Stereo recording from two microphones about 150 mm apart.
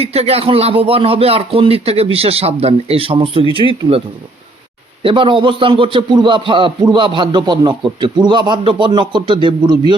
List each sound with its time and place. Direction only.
0.0 s a man's voice: 40° right (ahead or behind)
5.0 s a man's voice: 35° right (ahead or behind)